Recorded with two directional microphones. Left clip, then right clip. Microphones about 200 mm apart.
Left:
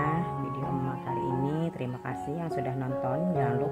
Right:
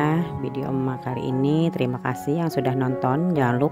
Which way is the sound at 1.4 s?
35° right (ahead or behind).